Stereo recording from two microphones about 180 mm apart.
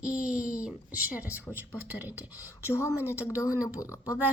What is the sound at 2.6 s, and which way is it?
Speech, 15° left (ahead or behind).